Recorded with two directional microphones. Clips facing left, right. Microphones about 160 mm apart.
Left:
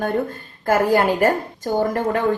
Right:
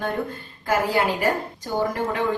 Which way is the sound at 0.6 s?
45° left (ahead or behind).